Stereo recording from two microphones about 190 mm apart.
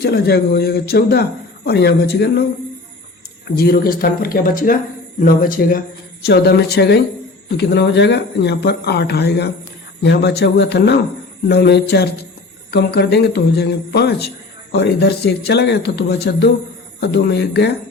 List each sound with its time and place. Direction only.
0.0 s a man's voice: 55° left (ahead or behind)
3.5 s a man's voice: 55° left (ahead or behind)